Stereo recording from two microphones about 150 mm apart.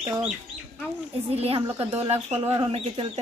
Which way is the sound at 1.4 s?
40° right (ahead or behind).